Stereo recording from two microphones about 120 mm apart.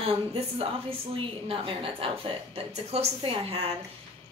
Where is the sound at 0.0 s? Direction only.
50° right (ahead or behind).